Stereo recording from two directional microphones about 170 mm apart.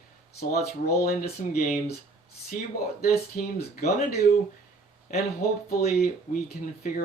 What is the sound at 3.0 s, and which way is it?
Speech, 65° left (ahead or behind).